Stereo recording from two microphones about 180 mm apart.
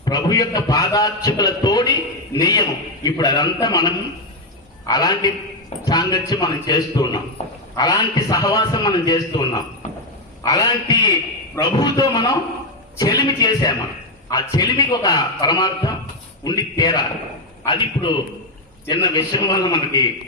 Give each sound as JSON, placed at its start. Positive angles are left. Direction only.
{"t": 0.0, "sound": "a man's voice", "side_deg": 20}